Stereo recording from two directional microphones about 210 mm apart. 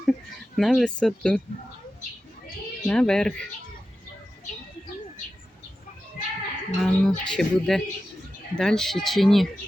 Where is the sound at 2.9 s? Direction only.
5° left (ahead or behind).